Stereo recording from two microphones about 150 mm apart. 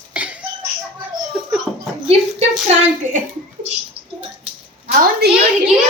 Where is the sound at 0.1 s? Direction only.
10° right (ahead or behind).